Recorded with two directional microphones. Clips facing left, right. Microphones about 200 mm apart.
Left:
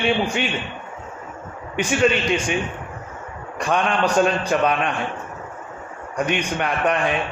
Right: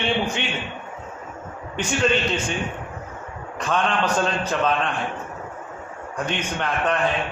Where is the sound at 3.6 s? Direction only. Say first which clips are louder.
Left 2 dB; 10° left (ahead or behind).